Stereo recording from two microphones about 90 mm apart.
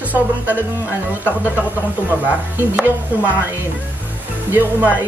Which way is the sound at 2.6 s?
20° right (ahead or behind).